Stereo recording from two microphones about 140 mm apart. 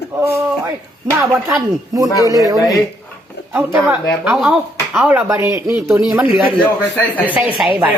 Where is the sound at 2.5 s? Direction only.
25° left (ahead or behind).